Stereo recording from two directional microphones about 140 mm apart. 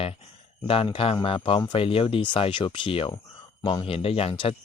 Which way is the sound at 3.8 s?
45° left (ahead or behind).